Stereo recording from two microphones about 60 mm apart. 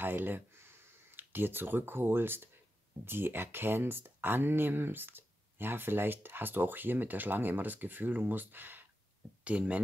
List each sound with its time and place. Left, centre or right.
0.0 s speech: right